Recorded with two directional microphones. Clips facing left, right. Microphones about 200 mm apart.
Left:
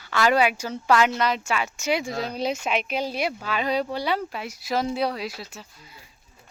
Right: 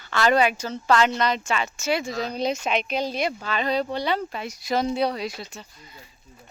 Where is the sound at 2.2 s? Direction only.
5° left (ahead or behind).